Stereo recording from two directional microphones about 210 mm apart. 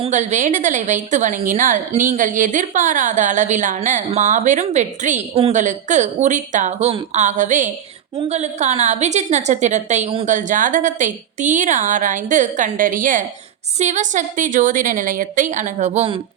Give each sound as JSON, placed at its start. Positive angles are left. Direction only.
{"t": 0.0, "sound": "a woman's voice", "side_deg": -35}